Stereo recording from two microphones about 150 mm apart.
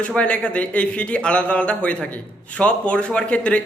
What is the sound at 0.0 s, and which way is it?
A man's voice, 10° left (ahead or behind).